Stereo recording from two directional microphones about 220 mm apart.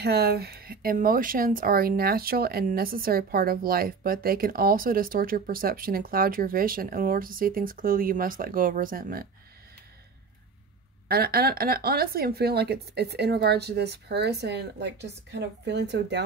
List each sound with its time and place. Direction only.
0.0 s speech: 45° right (ahead or behind)
11.1 s speech: 45° right (ahead or behind)